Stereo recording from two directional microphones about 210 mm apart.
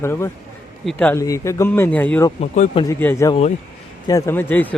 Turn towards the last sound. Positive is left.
turn(degrees=10)  # may be behind; listen again after turning